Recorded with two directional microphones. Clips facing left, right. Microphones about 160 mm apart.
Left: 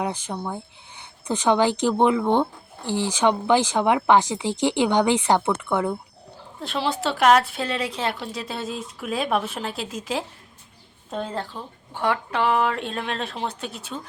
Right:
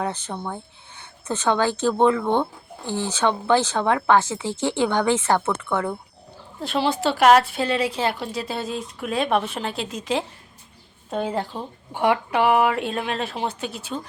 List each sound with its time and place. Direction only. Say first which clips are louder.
0.0 s speech: even; 10° left (ahead or behind)
6.6 s a woman's voice: right 3 dB; centre (ahead or behind)
11.1 s a woman's voice: right 4 dB; 10° right (ahead or behind)